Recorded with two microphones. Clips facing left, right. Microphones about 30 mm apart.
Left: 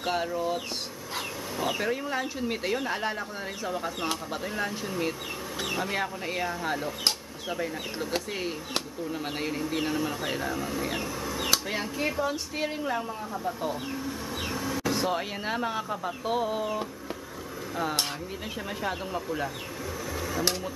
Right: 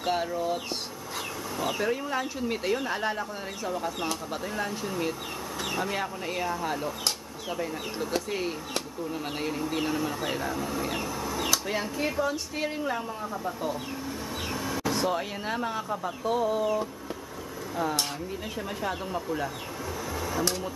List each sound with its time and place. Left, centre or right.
0.0 s a man's voice: centre
1.6 s a man's voice: centre
14.5 s speech: centre
18.8 s speech: centre